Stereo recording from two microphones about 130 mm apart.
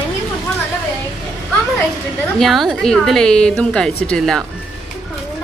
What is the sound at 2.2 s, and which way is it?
A woman's voice, 5° left (ahead or behind).